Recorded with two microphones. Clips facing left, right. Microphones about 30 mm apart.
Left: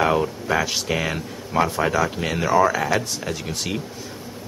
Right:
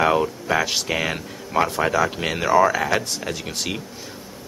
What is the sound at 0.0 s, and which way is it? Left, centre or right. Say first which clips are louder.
Speech: right 1 dB; centre.